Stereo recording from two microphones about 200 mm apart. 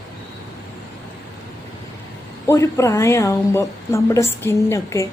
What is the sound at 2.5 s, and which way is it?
A woman's voice, 15° left (ahead or behind).